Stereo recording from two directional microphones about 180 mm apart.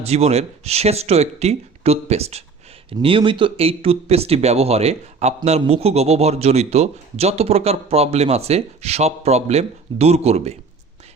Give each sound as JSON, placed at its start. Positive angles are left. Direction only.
{"t": 0.0, "sound": "a man's voice", "side_deg": -35}